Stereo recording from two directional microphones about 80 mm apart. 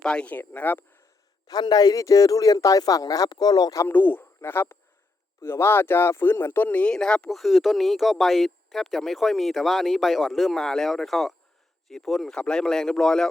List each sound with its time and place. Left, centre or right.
0.0 s speech: centre
1.5 s a man's voice: left
3.8 s speech: left; by 13.2 s centre